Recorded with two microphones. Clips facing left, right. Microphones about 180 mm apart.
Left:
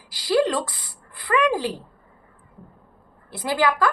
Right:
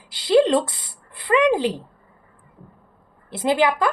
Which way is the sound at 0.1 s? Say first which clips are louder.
Right 5 dB; 25° right (ahead or behind).